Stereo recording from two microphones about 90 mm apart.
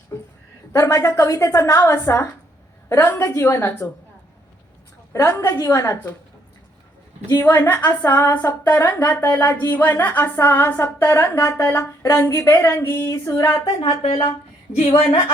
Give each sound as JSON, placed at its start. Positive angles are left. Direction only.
{"t": 0.1, "sound": "a sound", "side_deg": 30}
{"t": 0.7, "sound": "a woman's voice", "side_deg": 35}
{"t": 5.1, "sound": "a woman's voice", "side_deg": 30}
{"t": 7.3, "sound": "a woman's voice", "side_deg": 30}
{"t": 13.8, "sound": "speech", "side_deg": 85}